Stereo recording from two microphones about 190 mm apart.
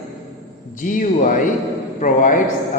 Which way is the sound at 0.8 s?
45° left (ahead or behind).